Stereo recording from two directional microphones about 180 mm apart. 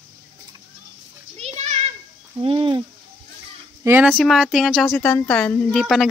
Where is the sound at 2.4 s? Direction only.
30° right (ahead or behind).